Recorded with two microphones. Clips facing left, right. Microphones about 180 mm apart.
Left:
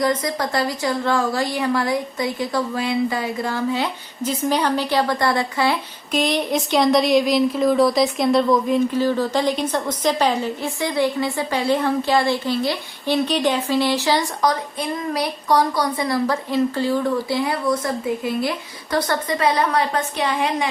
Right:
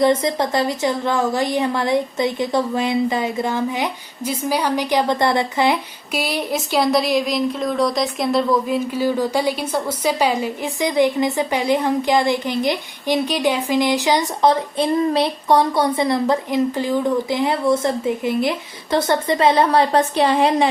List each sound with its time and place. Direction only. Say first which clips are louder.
0.0 s a woman's voice: right 4 dB; 25° right (ahead or behind)
6.1 s a woman's voice: left 2 dB; 5° right (ahead or behind); by 20.7 s 30° right (ahead or behind)